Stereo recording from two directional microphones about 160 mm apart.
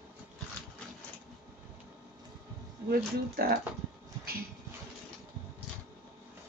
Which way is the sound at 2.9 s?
70° right (ahead or behind).